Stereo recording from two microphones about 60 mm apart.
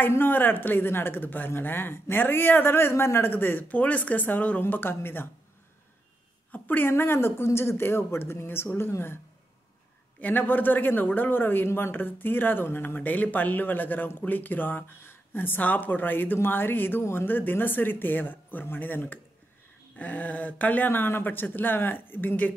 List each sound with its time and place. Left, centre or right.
0.1 s speech: left
6.5 s a sound: left
6.9 s speech: left
10.2 s speech: left